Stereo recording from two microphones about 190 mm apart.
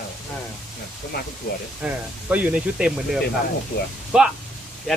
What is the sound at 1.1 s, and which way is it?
Speech, 55° left (ahead or behind).